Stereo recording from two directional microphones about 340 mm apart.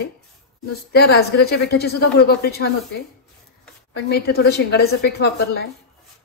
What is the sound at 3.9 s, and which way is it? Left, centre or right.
A woman's voice, left.